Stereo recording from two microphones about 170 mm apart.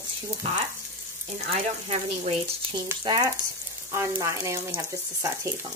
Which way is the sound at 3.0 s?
20° right (ahead or behind).